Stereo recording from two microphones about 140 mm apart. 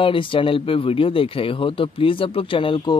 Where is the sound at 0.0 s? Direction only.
40° left (ahead or behind).